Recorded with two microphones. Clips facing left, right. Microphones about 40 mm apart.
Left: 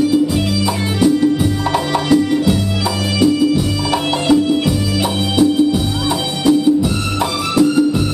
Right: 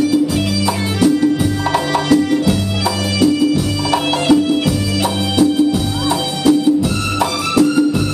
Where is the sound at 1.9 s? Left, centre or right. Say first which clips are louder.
Even; centre.